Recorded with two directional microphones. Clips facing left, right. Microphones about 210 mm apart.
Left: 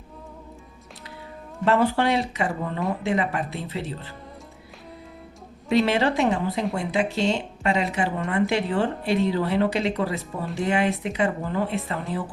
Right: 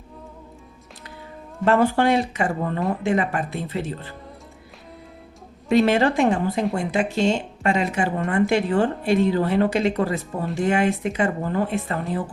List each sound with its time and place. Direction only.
1.6 s speech: 50° right (ahead or behind)
5.6 s speech: 50° right (ahead or behind)